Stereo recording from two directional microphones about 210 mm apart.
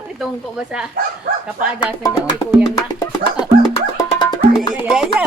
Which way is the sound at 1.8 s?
20° left (ahead or behind).